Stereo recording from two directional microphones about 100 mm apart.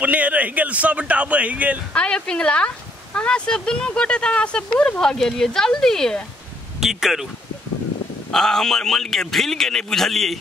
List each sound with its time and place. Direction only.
0.0 s speech: 15° right (ahead or behind)
2.0 s a man's voice: 10° left (ahead or behind)
8.3 s a man's voice: 5° left (ahead or behind)